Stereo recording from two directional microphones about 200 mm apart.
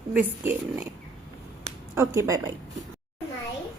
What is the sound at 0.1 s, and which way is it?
Speech, 10° right (ahead or behind).